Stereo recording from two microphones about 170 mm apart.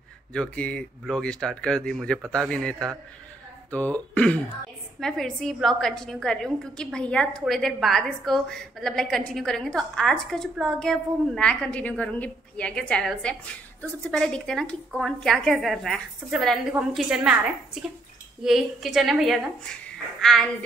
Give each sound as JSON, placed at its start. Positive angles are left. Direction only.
{"t": 0.3, "sound": "a woman's voice", "side_deg": 5}
{"t": 18.4, "sound": "a woman's voice", "side_deg": 0}